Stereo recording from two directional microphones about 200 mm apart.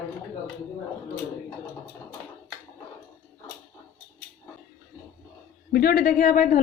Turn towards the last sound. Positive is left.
turn(degrees=40)  # may be behind; listen again after turning